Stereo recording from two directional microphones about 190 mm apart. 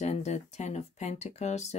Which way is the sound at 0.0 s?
35° left (ahead or behind).